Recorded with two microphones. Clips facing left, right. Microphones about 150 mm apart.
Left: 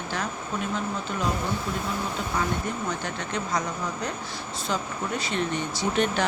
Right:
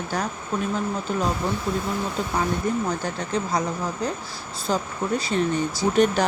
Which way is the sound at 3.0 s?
35° right (ahead or behind).